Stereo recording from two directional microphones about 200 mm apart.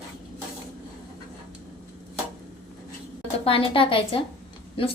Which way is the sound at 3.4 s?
30° left (ahead or behind).